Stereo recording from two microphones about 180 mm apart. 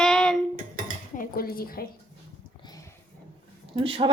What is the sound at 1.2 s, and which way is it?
Speech, 55° left (ahead or behind).